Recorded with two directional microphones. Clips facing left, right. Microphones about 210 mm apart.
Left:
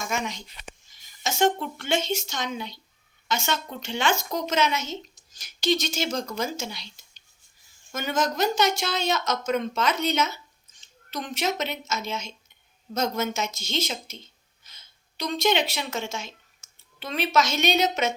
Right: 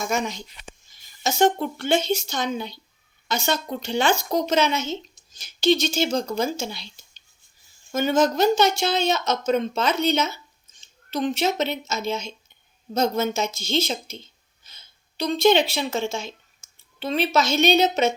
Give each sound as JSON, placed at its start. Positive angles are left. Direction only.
{"t": 0.0, "sound": "a woman's voice", "side_deg": -35}
{"t": 7.9, "sound": "speech", "side_deg": -30}